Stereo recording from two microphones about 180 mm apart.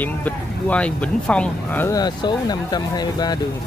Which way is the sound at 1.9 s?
20° left (ahead or behind).